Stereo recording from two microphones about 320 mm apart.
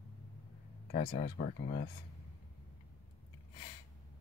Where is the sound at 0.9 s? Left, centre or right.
Left.